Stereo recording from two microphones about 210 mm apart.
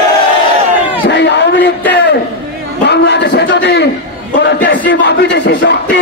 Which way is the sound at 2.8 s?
55° left (ahead or behind).